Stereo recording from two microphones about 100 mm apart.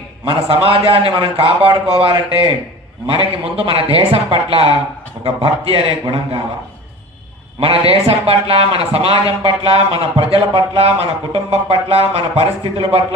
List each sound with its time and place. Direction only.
0.2 s a man's voice: 70° right (ahead or behind)
5.2 s a man's voice: 85° right
7.6 s a man's voice: 75° right (ahead or behind)